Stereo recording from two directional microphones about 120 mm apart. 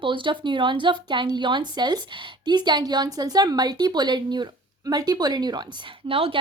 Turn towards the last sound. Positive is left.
turn(degrees=-50)  # may be behind; listen again after turning